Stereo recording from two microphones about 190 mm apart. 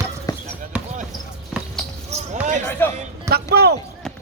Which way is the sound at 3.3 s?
55° right (ahead or behind).